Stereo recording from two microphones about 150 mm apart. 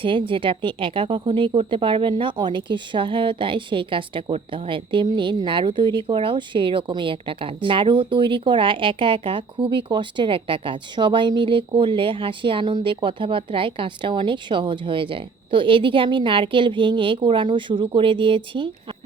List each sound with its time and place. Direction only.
0.0 s speech: 35° right (ahead or behind)